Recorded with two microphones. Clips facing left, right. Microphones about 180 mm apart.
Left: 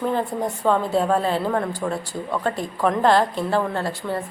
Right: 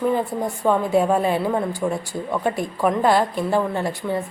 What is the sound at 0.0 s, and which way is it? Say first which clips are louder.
A woman's voice: right 2 dB; 10° right (ahead or behind).